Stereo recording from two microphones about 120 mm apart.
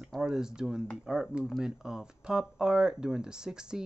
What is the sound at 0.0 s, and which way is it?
Speech, 5° right (ahead or behind).